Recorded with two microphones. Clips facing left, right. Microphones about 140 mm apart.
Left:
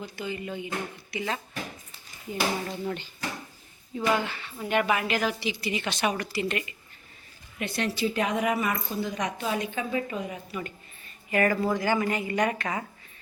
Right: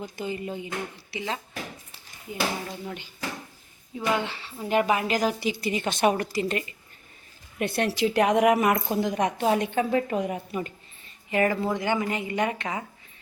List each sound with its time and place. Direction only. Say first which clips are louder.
0.0 s a woman's voice: right 2 dB; 40° right (ahead or behind)
2.3 s speech: left 1 dB; 5° right (ahead or behind)
4.2 s a woman's voice: right 1 dB; 25° right (ahead or behind)
7.6 s a woman's voice: right 5 dB; 55° right (ahead or behind)
7.9 s a woman's voice: right 5 dB; 75° right (ahead or behind)
9.1 s a woman's voice: right 7 dB; 55° right (ahead or behind)
11.3 s a woman's voice: even; 20° right (ahead or behind)